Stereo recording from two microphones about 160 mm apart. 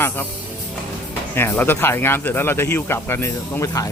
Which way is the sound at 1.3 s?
15° left (ahead or behind).